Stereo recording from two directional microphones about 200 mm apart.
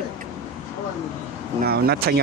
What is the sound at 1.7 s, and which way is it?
Speech, 50° right (ahead or behind).